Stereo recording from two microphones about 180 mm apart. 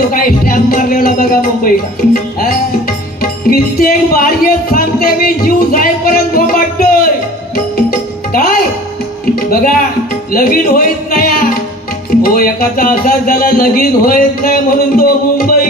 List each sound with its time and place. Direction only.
0.1 s speech: 50° left (ahead or behind)
3.2 s music: 55° left (ahead or behind)
8.3 s music: 55° left (ahead or behind)
10.3 s speech: 50° left (ahead or behind)